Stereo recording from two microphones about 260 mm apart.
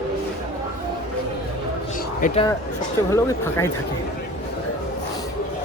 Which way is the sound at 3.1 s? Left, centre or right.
Centre.